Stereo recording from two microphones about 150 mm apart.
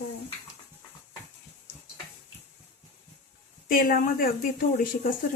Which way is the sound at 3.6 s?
70° left (ahead or behind).